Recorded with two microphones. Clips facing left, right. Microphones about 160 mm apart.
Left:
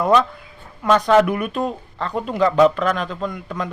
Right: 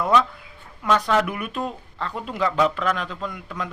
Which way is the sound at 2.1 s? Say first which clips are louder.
Left 10 dB; 40° left (ahead or behind).